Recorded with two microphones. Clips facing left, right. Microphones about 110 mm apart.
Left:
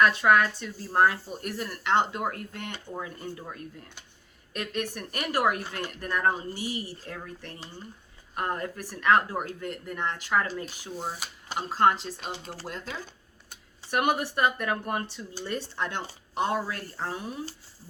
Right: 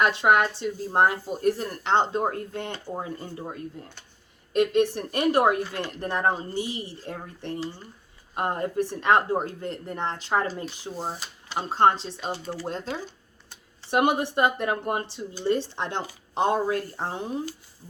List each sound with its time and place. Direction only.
0.0 s speech: 25° right (ahead or behind)
13.9 s speech: 25° right (ahead or behind)